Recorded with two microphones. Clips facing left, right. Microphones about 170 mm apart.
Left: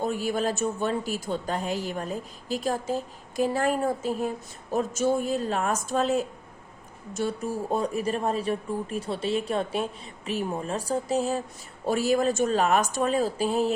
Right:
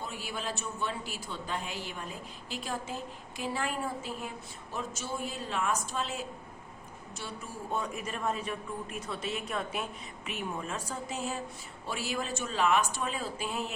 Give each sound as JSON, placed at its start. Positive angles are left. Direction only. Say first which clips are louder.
{"t": 0.0, "sound": "a woman's voice", "louder": "left 12 dB", "side_deg": 45}